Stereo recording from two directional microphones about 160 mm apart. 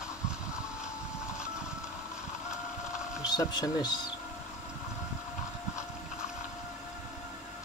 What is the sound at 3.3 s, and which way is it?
Speech, 25° left (ahead or behind).